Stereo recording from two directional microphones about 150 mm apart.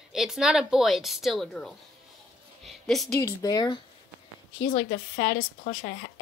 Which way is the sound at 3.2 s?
25° left (ahead or behind).